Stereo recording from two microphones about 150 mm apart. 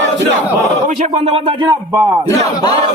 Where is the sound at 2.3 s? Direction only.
25° left (ahead or behind).